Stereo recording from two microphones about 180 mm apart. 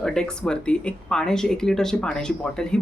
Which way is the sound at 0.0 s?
5° left (ahead or behind).